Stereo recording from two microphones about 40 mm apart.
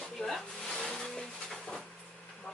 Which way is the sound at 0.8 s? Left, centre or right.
Centre.